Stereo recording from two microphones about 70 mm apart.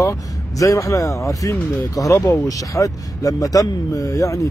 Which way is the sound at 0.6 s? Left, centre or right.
Left.